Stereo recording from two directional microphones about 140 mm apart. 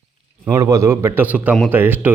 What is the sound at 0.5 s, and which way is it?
A man's voice, 25° right (ahead or behind).